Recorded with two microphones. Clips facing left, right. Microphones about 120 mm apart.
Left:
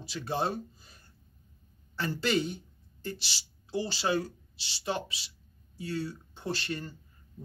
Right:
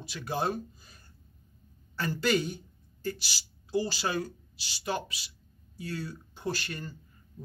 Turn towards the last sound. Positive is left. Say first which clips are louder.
# even
turn(degrees=25)  # may be behind; listen again after turning